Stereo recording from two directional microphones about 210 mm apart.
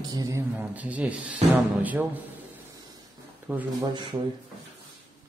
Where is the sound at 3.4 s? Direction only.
10° right (ahead or behind).